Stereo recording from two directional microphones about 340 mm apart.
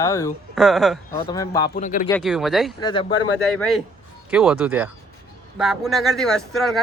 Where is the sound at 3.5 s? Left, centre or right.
Centre.